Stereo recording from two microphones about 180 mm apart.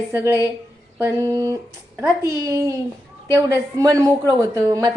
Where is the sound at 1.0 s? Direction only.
15° right (ahead or behind).